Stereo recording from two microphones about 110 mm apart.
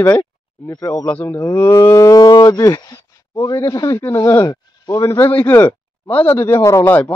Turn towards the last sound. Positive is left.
turn(degrees=25)  # may be behind; listen again after turning